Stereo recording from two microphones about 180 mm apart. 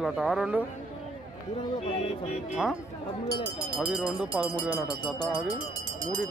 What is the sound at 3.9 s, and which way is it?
Speech, 5° right (ahead or behind).